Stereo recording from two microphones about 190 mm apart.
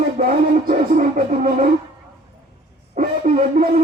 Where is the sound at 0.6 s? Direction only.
45° right (ahead or behind).